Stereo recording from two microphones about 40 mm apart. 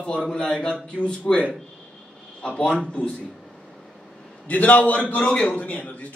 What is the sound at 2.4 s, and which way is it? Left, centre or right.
Speech, left.